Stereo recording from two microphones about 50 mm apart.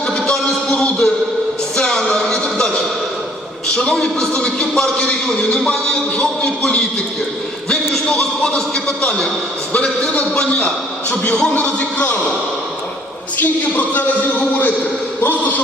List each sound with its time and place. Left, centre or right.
0.2 s music: centre
3.8 s a man's voice: centre
8.2 s a man's voice: centre
10.0 s a man's voice: centre
13.4 s speech: left